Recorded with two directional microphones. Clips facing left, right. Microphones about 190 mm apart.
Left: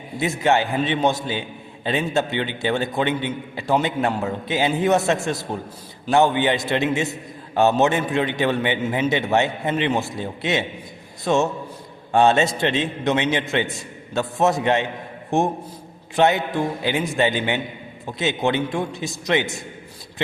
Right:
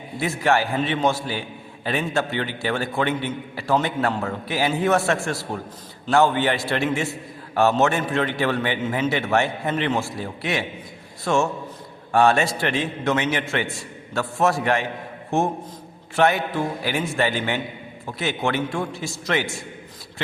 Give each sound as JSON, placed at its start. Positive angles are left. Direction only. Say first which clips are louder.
{"t": 0.2, "sound": "a man's voice", "louder": "left 1 dB", "side_deg": 20}